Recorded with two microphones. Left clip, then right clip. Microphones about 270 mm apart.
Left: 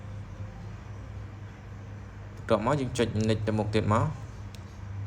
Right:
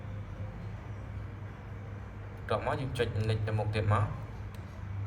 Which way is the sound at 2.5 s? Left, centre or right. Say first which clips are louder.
Left 6 dB; left.